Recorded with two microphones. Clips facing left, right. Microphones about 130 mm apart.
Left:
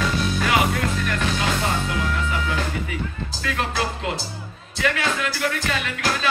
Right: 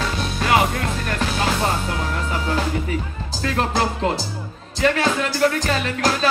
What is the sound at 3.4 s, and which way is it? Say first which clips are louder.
Music: right 5 dB; 40° right (ahead or behind).